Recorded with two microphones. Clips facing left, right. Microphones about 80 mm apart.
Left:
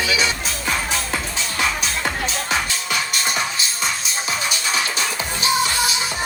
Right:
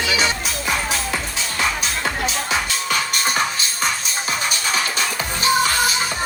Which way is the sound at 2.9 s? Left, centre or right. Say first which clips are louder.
Right 2 dB; right.